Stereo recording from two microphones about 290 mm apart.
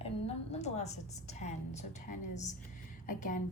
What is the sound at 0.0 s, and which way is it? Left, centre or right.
A woman's voice, left.